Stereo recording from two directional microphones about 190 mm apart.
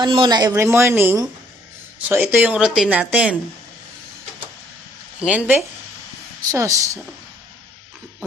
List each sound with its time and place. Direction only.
0.0 s a woman's voice: 25° right (ahead or behind); by 3.3 s 5° right (ahead or behind)
5.2 s a woman's voice: 5° right (ahead or behind)